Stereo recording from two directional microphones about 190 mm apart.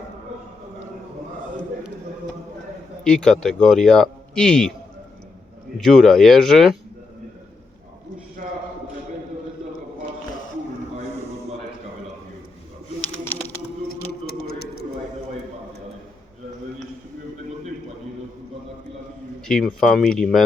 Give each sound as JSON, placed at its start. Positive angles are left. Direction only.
{"t": 3.0, "sound": "a man's voice", "side_deg": 5}
{"t": 5.7, "sound": "a man's voice", "side_deg": 0}
{"t": 14.1, "sound": "a sound", "side_deg": 55}
{"t": 19.5, "sound": "a man's voice", "side_deg": 5}